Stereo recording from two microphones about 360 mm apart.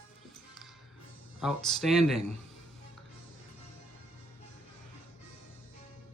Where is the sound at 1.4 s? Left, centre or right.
Centre.